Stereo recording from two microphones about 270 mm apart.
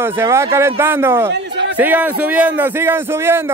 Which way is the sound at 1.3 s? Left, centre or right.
Right.